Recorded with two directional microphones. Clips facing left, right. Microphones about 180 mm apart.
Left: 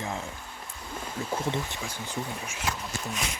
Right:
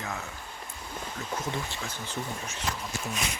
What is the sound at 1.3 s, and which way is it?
Speech, 25° left (ahead or behind).